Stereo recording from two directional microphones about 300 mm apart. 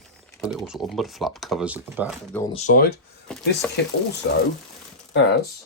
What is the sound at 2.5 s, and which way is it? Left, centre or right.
Speech, left.